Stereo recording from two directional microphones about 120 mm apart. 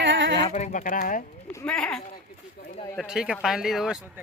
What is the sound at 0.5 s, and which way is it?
Speech, 85° left.